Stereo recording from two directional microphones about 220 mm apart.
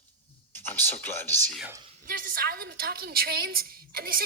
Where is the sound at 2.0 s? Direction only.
40° right (ahead or behind).